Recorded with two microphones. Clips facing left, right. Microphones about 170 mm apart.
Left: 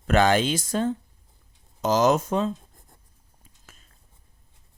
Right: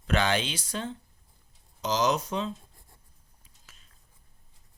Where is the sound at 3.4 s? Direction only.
45° left (ahead or behind).